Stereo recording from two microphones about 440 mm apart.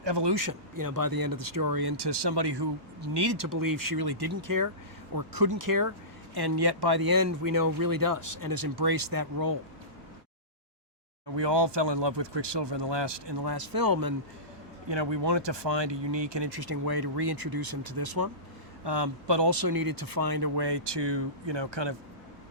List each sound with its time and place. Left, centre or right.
0.0 s speech: right
0.3 s speech: right
4.3 s speech: right
6.3 s speech: right
11.3 s speech: right
14.8 s speech: right
18.9 s speech: right